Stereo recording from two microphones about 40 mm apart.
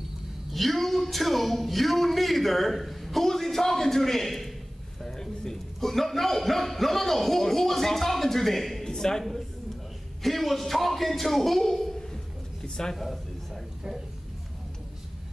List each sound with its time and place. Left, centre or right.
0.5 s a man's voice: centre
10.2 s a man's voice: centre
12.6 s a sound: centre
12.9 s a man's voice: centre